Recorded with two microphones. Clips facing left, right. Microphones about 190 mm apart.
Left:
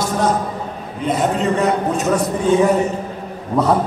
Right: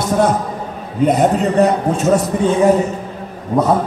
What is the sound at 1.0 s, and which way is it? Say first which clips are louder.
Speech: right 5 dB; 40° right (ahead or behind).